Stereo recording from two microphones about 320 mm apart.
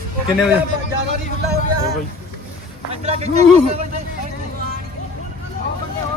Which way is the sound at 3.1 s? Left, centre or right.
Centre.